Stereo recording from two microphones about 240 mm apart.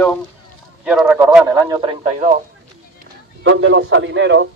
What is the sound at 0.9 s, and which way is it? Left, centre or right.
Speech, centre.